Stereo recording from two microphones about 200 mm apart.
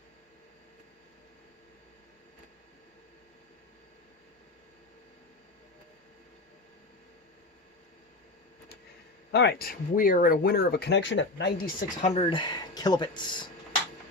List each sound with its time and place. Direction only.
9.3 s speech: 55° left (ahead or behind)
12.1 s speech: 25° left (ahead or behind)